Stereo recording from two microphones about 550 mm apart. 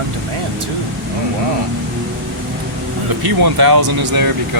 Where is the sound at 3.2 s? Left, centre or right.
Right.